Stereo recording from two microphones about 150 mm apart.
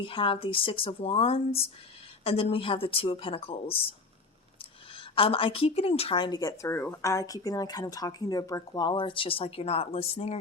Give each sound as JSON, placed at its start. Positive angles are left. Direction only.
{"t": 0.0, "sound": "speech", "side_deg": 35}
{"t": 4.9, "sound": "a woman's voice", "side_deg": 35}